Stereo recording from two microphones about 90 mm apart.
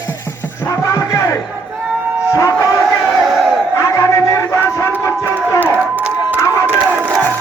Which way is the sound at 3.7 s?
35° left (ahead or behind).